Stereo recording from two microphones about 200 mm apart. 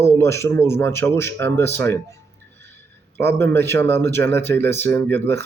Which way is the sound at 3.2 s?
10° left (ahead or behind).